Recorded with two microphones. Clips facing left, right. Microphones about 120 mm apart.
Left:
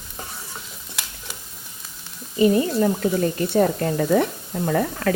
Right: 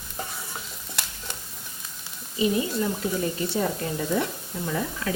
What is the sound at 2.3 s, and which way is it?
Speech, 50° left (ahead or behind).